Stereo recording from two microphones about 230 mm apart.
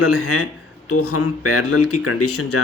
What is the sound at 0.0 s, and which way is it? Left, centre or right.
Speech, left.